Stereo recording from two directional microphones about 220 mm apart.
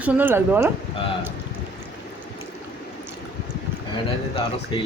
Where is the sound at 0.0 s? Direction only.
10° right (ahead or behind).